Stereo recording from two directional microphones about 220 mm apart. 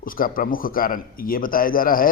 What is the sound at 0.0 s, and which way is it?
Speech, 40° left (ahead or behind).